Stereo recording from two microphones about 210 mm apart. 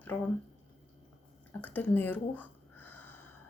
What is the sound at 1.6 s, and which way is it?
Speech, 10° left (ahead or behind).